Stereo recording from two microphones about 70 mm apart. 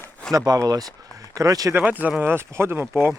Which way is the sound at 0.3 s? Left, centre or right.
Right.